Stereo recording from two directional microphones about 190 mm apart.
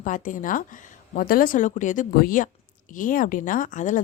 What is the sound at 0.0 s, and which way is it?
Speech, 45° left (ahead or behind).